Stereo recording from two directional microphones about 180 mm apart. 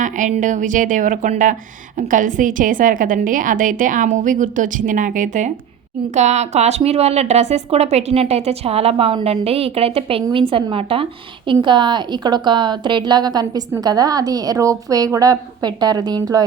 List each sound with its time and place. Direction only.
0.0 s a woman's voice: 45° right (ahead or behind); by 16.5 s 20° right (ahead or behind)